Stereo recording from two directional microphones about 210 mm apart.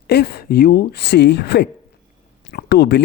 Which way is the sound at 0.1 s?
50° left (ahead or behind).